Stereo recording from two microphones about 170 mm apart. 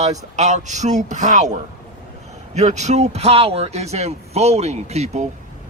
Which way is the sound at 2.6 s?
45° right (ahead or behind).